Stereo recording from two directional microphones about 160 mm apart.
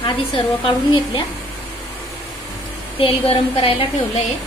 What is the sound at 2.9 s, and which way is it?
Speech, 35° left (ahead or behind).